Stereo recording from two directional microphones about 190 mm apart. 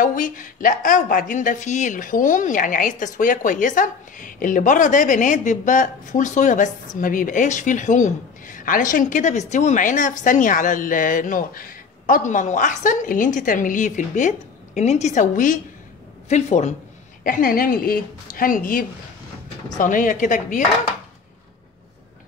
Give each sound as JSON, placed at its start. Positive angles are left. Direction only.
{"t": 0.0, "sound": "a woman's voice", "side_deg": 45}
{"t": 17.2, "sound": "a woman's voice", "side_deg": 50}